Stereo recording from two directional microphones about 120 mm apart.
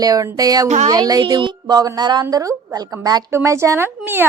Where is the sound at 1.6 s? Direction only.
30° right (ahead or behind).